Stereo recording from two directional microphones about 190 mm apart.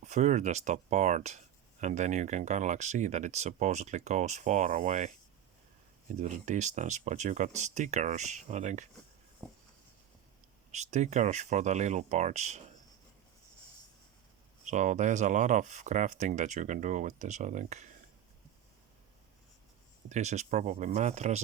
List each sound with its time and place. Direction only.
0.0 s speech: 40° right (ahead or behind)
9.4 s a sound: 10° left (ahead or behind)
10.7 s speech: 35° right (ahead or behind)
14.6 s speech: 40° right (ahead or behind)
20.1 s speech: 35° right (ahead or behind)